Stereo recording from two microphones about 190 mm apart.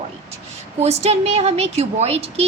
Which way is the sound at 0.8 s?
35° right (ahead or behind).